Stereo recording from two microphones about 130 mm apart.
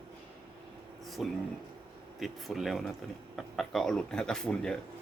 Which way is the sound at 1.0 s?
Centre (ahead or behind).